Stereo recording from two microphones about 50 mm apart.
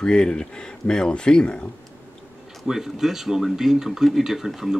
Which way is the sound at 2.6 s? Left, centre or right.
Centre.